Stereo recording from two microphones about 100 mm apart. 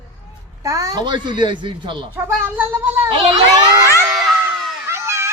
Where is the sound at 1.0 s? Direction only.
50° right (ahead or behind).